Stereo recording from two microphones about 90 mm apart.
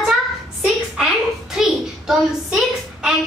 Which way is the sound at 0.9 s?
5° right (ahead or behind).